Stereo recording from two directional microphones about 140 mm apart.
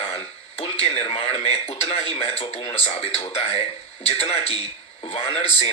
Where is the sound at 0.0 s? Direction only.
45° left (ahead or behind).